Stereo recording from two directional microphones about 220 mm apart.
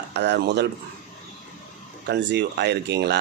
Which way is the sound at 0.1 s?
50° right (ahead or behind).